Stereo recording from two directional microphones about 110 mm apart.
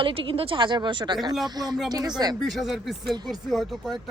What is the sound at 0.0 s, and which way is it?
Speech, 55° right (ahead or behind).